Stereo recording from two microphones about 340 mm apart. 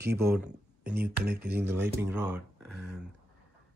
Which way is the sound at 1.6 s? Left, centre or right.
Centre.